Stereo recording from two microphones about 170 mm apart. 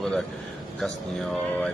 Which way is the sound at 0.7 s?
5° left (ahead or behind).